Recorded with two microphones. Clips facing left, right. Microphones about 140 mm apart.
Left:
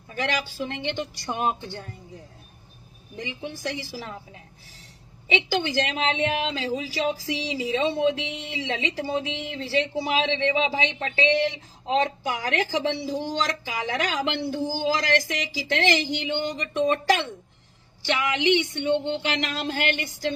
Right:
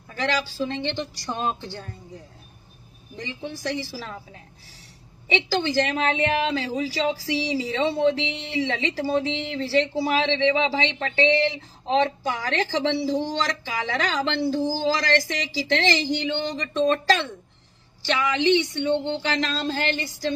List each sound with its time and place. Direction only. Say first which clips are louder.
0.1 s a woman's voice: right 2 dB; 20° left (ahead or behind)
3.2 s a woman's voice: right 1 dB; 15° left (ahead or behind)
12.0 s a woman's voice: right 2 dB; 15° left (ahead or behind)